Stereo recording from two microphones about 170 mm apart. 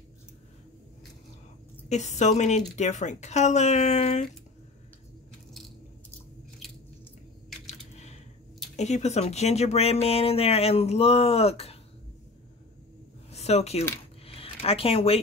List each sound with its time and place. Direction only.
1.9 s a woman's voice: 45° left (ahead or behind)
7.6 s a sound: 40° left (ahead or behind)
8.7 s speech: 40° left (ahead or behind)
13.3 s speech: 40° left (ahead or behind)
14.2 s zipper: 35° left (ahead or behind)